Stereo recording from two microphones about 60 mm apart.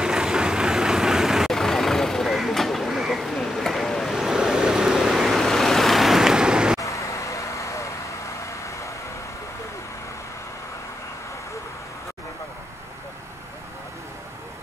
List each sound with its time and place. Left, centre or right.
0.0 s vehicle: centre
1.5 s vehicle: centre
3.3 s a sound: centre
4.1 s vehicle: centre
6.8 s vehicle: left